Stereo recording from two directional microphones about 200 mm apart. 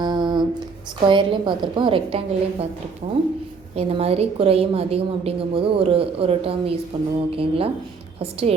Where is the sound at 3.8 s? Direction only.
30° right (ahead or behind).